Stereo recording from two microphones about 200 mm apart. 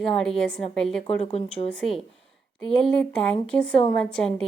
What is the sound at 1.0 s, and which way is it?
Speech, 30° left (ahead or behind).